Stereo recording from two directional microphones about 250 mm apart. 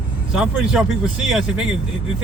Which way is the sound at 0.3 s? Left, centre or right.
Centre.